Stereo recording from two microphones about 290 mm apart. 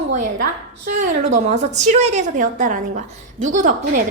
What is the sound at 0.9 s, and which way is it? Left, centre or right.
A woman's voice, right.